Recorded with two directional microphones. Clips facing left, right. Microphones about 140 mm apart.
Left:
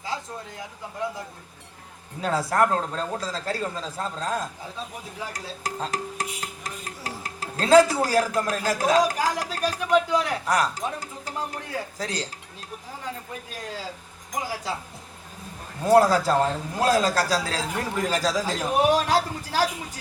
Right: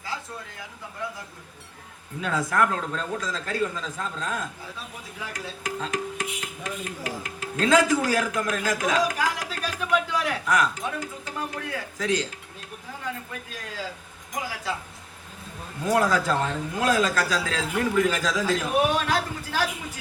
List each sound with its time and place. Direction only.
2.2 s music: 35° left (ahead or behind)
15.8 s music: 35° left (ahead or behind)